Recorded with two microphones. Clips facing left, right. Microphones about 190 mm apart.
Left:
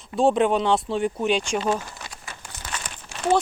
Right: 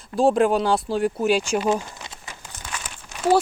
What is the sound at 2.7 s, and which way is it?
Crumpling, 5° right (ahead or behind).